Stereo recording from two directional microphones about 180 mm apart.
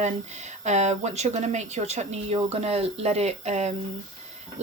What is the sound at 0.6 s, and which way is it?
Speech, 40° right (ahead or behind).